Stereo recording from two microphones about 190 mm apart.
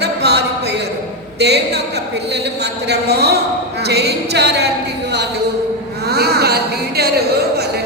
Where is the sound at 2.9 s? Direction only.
60° right (ahead or behind).